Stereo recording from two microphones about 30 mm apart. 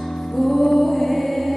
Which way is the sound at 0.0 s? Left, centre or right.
Centre.